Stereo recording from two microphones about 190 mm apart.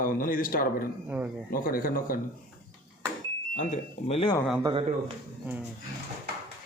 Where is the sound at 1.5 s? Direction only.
50° left (ahead or behind).